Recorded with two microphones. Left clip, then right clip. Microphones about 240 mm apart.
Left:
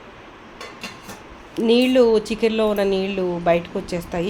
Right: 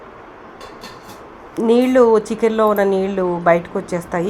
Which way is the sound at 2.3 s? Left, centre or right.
Centre.